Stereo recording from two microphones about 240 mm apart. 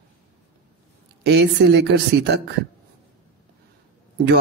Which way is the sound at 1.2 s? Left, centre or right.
Right.